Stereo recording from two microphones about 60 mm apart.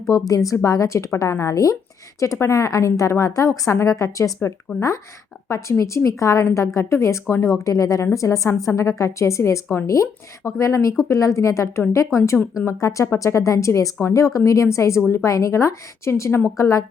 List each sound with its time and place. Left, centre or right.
0.1 s a woman's voice: left
4.7 s speech: centre
5.5 s a woman's voice: left
7.4 s a woman's voice: left
12.8 s a woman's voice: left